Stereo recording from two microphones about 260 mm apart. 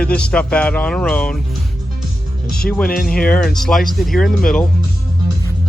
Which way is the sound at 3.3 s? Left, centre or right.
Centre.